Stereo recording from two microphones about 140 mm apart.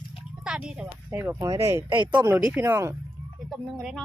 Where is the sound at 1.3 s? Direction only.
25° right (ahead or behind).